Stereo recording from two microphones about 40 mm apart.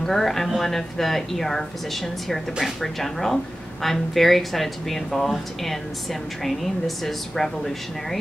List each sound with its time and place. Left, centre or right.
0.0 s a woman's voice: centre